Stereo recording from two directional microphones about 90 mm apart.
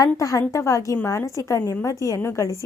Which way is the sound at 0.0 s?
40° left (ahead or behind).